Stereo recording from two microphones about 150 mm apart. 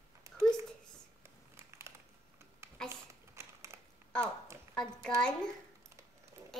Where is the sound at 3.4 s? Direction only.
20° right (ahead or behind).